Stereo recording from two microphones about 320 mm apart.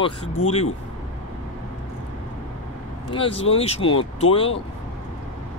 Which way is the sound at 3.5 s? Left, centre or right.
Centre.